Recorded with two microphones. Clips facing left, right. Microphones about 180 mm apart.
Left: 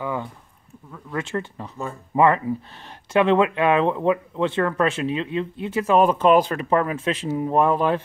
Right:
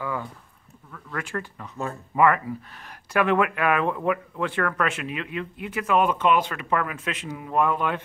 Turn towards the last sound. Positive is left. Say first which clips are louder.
# left 5 dB
turn(degrees=35)  # may be behind; listen again after turning